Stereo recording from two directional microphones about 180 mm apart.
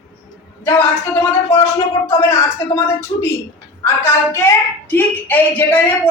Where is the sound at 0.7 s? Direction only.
15° left (ahead or behind).